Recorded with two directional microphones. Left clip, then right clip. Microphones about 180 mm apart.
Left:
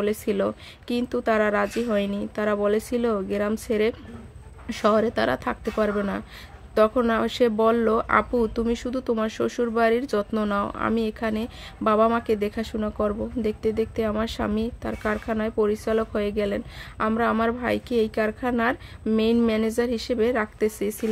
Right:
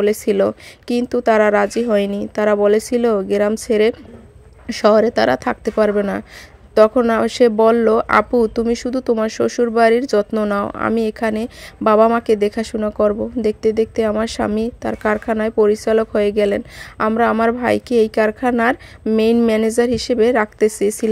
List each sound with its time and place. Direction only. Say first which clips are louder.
0.0 s speech: right 9 dB; 30° right (ahead or behind)